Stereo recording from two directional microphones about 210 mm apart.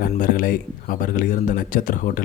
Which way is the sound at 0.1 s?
40° left (ahead or behind).